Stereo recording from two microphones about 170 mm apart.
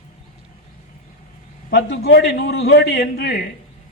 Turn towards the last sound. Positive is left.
turn(degrees=75)  # may be behind; listen again after turning